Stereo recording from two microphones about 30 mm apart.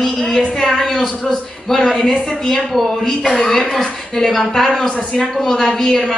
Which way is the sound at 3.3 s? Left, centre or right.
Centre.